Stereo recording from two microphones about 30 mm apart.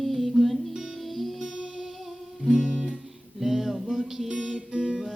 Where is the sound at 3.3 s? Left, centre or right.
Centre.